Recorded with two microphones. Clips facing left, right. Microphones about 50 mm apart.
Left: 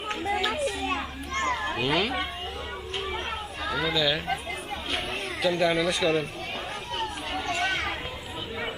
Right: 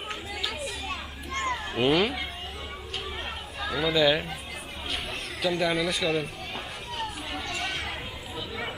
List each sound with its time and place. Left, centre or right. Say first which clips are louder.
0.3 s children playing: left 9 dB; left
1.3 s children playing: left 2 dB; centre
1.8 s a child's voice: right 5 dB; centre
3.9 s speech: right 5 dB; centre
5.4 s speech: left 2 dB; centre
7.4 s chatter: left 6 dB; left